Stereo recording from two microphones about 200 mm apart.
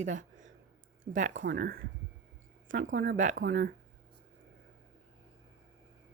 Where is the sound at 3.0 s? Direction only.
40° right (ahead or behind).